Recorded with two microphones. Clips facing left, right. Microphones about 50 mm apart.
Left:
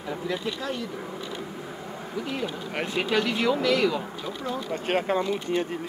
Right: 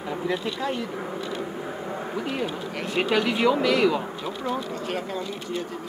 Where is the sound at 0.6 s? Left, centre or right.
Centre.